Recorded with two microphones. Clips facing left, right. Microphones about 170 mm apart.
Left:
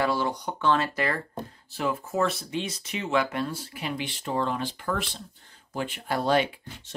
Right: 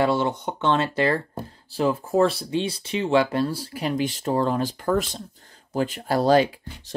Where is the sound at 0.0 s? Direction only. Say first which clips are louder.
Right 5 dB; 25° right (ahead or behind).